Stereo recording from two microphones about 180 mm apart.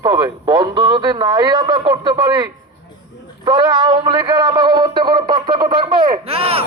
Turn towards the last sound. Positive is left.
turn(degrees=-35)  # may be behind; listen again after turning